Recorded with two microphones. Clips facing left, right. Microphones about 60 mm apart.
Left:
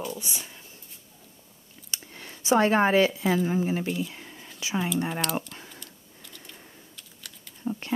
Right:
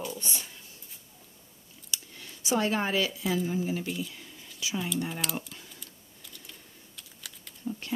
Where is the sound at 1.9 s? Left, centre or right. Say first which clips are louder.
Left 1 dB; left.